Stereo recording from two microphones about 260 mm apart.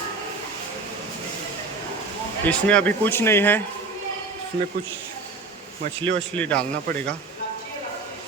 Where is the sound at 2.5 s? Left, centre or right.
Centre.